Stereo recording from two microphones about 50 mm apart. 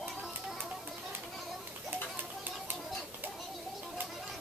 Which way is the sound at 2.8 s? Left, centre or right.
Centre.